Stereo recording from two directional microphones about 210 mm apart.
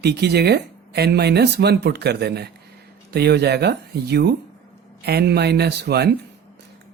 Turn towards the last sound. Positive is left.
turn(degrees=-50)  # may be behind; listen again after turning